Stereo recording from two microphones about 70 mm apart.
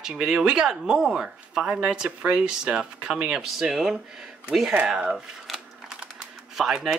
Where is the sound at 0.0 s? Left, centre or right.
Centre.